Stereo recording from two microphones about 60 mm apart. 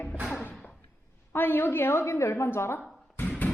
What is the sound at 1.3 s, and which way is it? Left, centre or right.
A woman's voice, left.